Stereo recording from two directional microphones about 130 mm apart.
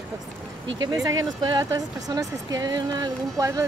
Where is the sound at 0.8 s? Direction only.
30° right (ahead or behind).